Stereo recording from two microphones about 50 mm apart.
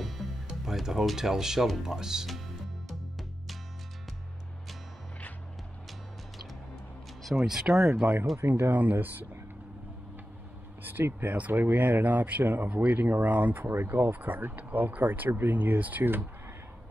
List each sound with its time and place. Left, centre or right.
0.5 s speech: centre
2.9 s music: centre
7.2 s speech: centre
8.4 s speech: right
10.8 s a sound: right
11.1 s speech: right